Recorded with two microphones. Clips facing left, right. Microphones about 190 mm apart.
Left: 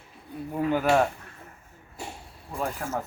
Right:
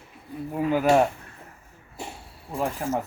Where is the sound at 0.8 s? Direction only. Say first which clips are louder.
Right 3 dB; 20° right (ahead or behind).